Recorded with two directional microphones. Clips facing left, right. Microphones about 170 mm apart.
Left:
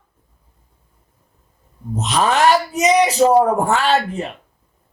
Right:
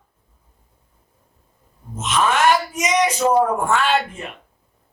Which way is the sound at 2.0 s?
35° left (ahead or behind).